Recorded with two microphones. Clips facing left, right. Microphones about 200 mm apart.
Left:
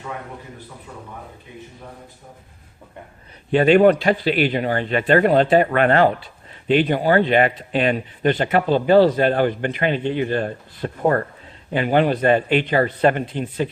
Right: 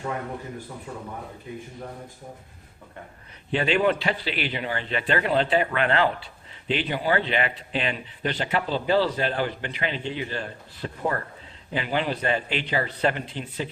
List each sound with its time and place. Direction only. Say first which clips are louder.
3.5 s speech: left 9 dB; 50° left (ahead or behind)